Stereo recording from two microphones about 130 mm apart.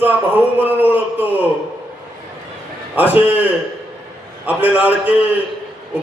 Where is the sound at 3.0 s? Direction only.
15° right (ahead or behind).